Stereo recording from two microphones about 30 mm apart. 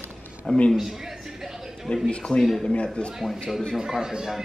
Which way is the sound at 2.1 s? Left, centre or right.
Left.